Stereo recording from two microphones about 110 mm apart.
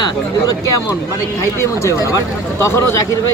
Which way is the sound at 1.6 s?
25° left (ahead or behind).